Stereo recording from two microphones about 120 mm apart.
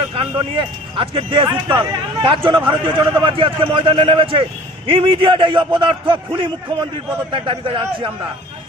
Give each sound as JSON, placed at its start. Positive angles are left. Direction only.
{"t": 0.1, "sound": "speech", "side_deg": -50}
{"t": 1.6, "sound": "a man's voice", "side_deg": -40}